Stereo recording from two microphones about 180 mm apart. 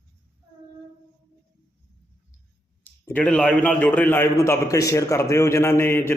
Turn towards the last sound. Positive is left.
turn(degrees=15)  # may be behind; listen again after turning